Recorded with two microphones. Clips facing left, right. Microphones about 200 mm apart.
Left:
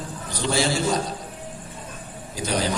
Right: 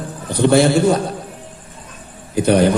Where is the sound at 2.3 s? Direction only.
60° right (ahead or behind).